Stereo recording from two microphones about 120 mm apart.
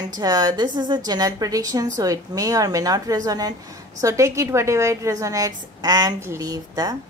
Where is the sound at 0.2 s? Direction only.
35° right (ahead or behind).